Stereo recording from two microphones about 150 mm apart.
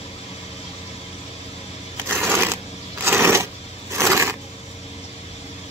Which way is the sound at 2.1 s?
15° right (ahead or behind).